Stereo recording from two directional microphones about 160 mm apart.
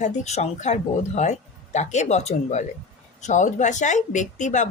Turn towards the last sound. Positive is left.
turn(degrees=50)  # may be behind; listen again after turning